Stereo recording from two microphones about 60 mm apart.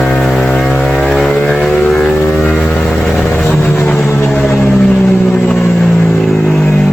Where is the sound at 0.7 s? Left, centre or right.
Centre.